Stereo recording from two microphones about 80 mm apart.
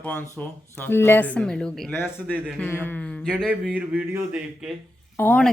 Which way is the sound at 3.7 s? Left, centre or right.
Centre.